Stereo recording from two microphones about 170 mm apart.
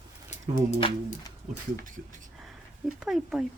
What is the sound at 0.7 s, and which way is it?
Speech, 40° left (ahead or behind).